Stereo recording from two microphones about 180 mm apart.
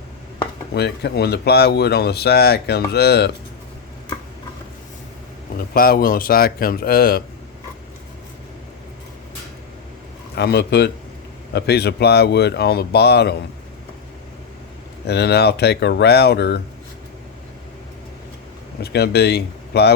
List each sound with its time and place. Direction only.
0.7 s speech: 65° left (ahead or behind)
5.7 s speech: 55° left (ahead or behind)
10.3 s speech: 65° left (ahead or behind)
15.0 s speech: 65° left (ahead or behind)
18.8 s speech: 65° left (ahead or behind)